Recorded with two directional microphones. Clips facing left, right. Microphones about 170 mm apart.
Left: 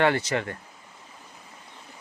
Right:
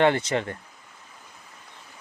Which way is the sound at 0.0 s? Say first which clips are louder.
Right 2 dB; 25° right (ahead or behind).